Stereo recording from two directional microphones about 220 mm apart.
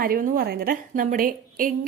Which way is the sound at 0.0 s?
40° right (ahead or behind).